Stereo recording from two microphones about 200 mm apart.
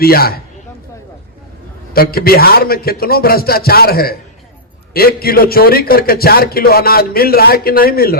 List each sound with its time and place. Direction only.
0.0 s a man's voice: 50° left (ahead or behind)
1.9 s a man's voice: 50° left (ahead or behind)